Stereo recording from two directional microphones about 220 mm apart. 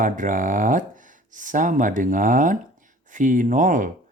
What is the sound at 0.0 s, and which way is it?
Speech, 35° right (ahead or behind).